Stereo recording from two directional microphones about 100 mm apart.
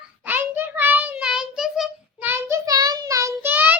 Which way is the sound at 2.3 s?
25° right (ahead or behind).